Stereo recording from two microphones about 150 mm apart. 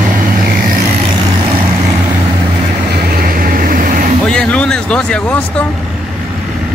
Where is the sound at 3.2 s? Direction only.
70° right (ahead or behind).